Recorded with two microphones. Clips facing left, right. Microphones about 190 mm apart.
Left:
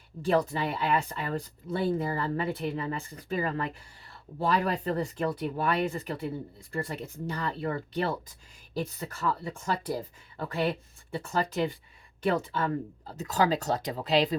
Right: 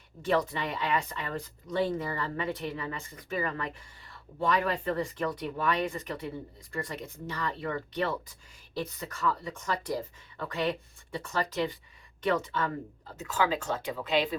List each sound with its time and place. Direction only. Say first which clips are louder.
0.2 s speech: left 2 dB; 35° left (ahead or behind)